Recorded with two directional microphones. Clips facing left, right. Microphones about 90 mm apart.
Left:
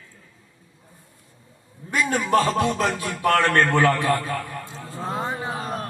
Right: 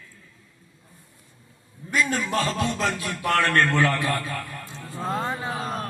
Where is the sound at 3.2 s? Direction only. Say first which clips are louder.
Left 4 dB; 45° left (ahead or behind).